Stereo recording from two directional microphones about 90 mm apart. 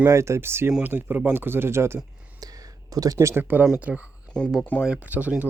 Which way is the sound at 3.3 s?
20° right (ahead or behind).